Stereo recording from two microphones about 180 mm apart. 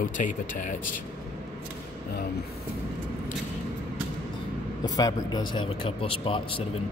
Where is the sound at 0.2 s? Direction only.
45° left (ahead or behind).